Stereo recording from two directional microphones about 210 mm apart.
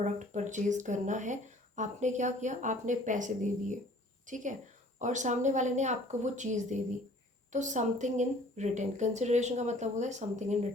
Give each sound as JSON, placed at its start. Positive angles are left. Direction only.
{"t": 0.0, "sound": "speech", "side_deg": -35}